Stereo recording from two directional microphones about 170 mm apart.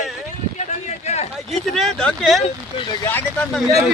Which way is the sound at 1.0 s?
40° left (ahead or behind).